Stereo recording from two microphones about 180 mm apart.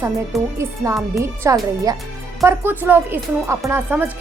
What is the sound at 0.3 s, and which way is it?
Speech, centre (ahead or behind).